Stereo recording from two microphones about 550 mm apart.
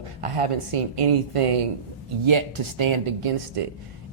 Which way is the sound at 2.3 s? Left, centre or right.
Right.